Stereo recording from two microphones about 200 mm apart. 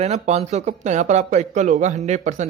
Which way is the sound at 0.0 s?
30° right (ahead or behind).